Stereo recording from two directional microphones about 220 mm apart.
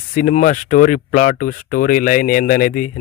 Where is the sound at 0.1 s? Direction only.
35° left (ahead or behind).